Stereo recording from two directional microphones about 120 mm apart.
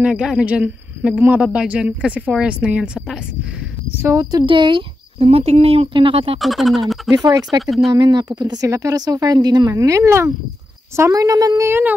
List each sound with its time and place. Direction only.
0.0 s speech: 5° right (ahead or behind)
4.0 s speech: 25° right (ahead or behind); by 4.8 s 45° right (ahead or behind)
5.2 s speech: 60° right (ahead or behind)
6.4 s speech: centre (ahead or behind)
7.2 s a woman's voice: 30° right (ahead or behind)
7.6 s speech: centre (ahead or behind)
7.9 s a woman's voice: 35° right (ahead or behind)